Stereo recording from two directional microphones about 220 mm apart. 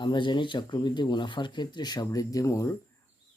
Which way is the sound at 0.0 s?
20° left (ahead or behind).